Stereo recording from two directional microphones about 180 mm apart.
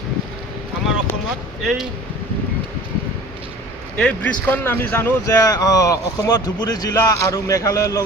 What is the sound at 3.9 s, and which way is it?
Speech, 5° left (ahead or behind).